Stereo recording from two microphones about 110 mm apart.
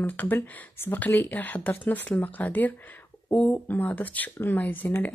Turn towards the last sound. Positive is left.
turn(degrees=15)  # may be behind; listen again after turning